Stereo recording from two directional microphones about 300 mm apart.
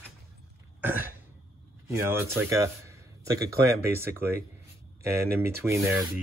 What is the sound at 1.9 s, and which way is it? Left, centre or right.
A man's voice, centre.